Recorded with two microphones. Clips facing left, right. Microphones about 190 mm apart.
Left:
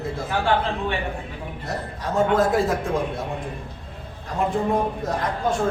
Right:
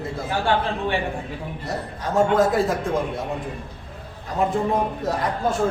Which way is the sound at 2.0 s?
Centre (ahead or behind).